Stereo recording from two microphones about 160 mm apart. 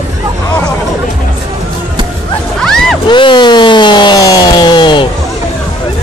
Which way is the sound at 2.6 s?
Centre (ahead or behind).